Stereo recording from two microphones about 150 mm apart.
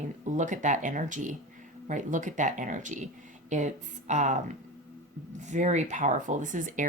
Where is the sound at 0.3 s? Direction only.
55° right (ahead or behind).